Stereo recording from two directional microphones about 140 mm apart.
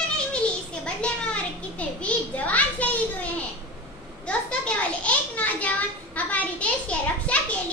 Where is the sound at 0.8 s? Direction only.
10° left (ahead or behind).